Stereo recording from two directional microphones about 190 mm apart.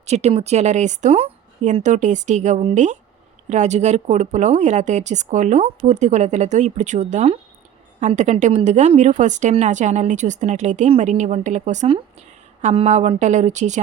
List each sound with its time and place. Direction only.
0.0 s a woman's voice: 35° right (ahead or behind)